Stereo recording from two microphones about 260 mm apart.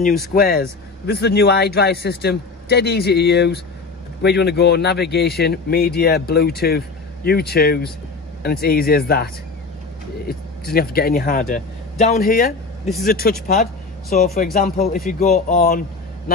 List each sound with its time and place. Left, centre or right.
0.3 s a man's voice: left